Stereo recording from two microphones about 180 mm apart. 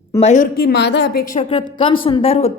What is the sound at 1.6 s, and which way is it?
Speech, 25° left (ahead or behind).